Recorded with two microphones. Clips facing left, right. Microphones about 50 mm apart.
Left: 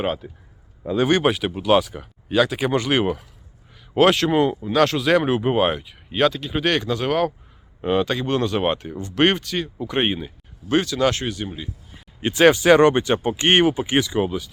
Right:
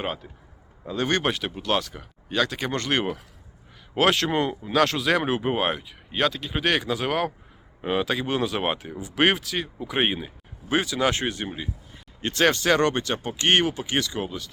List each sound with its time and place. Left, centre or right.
0.0 s speech: centre
11.1 s speech: right
12.2 s speech: centre